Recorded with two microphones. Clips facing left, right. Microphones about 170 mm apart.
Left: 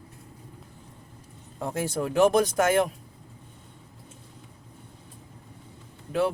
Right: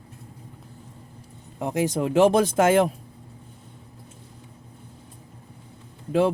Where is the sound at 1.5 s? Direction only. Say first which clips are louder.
Right 5 dB; 15° right (ahead or behind).